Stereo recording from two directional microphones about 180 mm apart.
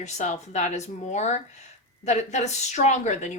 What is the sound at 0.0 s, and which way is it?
A woman's voice, 40° left (ahead or behind).